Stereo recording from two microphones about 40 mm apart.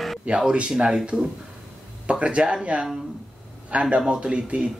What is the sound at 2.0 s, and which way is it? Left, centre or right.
A man's voice, right.